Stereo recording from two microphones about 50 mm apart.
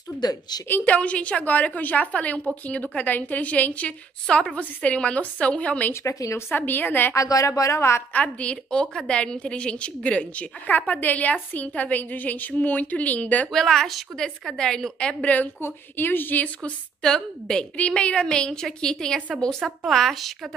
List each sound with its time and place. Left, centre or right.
0.7 s a woman's voice: left
6.0 s speech: left
6.5 s a woman's voice: left
7.2 s speech: left
8.1 s a woman's voice: left
13.5 s a woman's voice: centre; by 15.5 s left
15.6 s a woman's voice: left
17.0 s a woman's voice: centre